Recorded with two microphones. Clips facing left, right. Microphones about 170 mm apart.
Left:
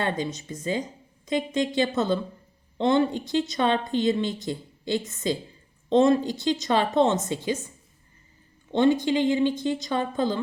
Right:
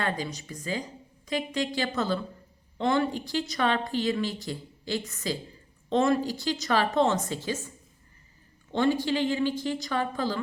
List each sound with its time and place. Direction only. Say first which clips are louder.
0.0 s speech: left 3 dB; 20° left (ahead or behind)
8.7 s speech: left 4 dB; 20° left (ahead or behind)